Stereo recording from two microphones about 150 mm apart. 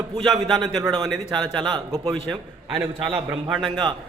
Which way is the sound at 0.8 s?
25° right (ahead or behind).